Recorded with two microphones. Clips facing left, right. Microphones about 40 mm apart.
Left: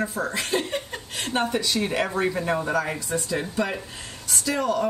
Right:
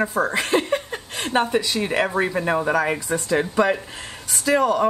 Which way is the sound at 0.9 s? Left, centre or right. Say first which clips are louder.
Right 5 dB; right.